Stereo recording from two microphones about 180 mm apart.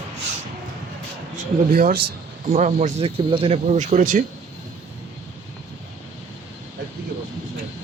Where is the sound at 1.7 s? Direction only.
50° right (ahead or behind).